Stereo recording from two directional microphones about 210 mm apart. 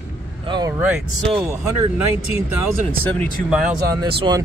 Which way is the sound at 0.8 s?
5° right (ahead or behind).